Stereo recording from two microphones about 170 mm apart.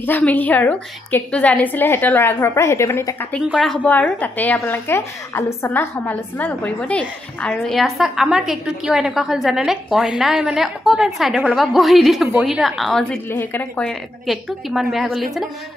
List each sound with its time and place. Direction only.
0.0 s a woman's voice: 10° left (ahead or behind)
3.4 s a woman's voice: centre (ahead or behind)